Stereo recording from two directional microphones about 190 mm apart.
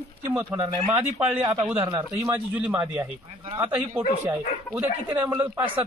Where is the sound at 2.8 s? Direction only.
20° right (ahead or behind).